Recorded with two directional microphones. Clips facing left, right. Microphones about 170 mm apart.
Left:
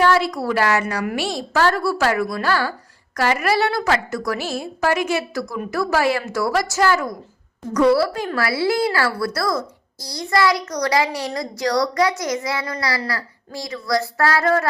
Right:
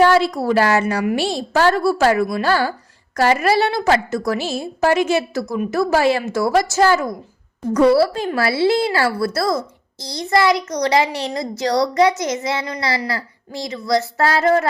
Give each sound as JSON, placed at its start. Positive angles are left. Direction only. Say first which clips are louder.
{"t": 0.0, "sound": "speech", "louder": "right 3 dB", "side_deg": -25}